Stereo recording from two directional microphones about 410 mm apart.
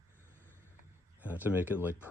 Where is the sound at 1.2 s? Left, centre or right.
Centre.